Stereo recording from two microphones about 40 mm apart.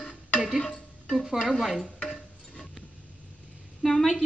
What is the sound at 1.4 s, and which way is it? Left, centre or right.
Speech, centre.